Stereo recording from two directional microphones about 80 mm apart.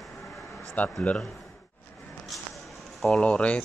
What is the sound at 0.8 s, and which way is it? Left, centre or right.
Speech, centre.